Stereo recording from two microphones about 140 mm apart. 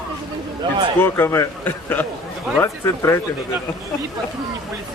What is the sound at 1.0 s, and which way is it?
A man's voice, 15° left (ahead or behind).